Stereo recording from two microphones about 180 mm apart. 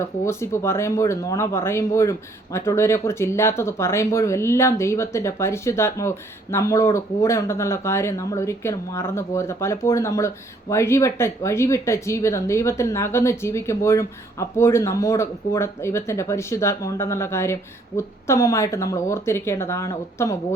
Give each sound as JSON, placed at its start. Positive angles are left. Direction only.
{"t": 0.3, "sound": "speech", "side_deg": 15}